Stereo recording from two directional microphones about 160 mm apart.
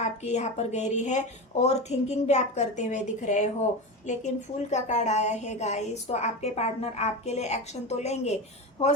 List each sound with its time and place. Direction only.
0.0 s a woman's voice: 45° left (ahead or behind)